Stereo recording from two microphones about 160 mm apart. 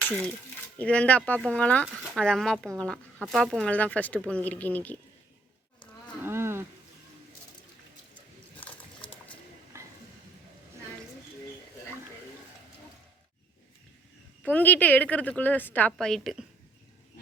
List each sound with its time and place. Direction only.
0.1 s speech: 5° left (ahead or behind)
6.2 s wild animals: 15° right (ahead or behind)
14.4 s speech: 10° left (ahead or behind)